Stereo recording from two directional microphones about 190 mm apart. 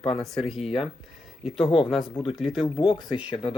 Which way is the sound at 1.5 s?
Centre (ahead or behind).